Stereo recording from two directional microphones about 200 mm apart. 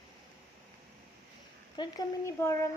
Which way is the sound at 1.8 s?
15° left (ahead or behind).